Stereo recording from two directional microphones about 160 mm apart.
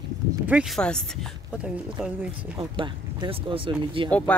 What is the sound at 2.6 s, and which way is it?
Speech, 30° right (ahead or behind).